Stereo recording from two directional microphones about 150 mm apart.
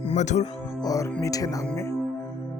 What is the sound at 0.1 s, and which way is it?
Speech, 50° left (ahead or behind).